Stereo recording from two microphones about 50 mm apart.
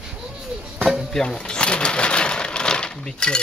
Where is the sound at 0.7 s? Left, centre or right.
Centre.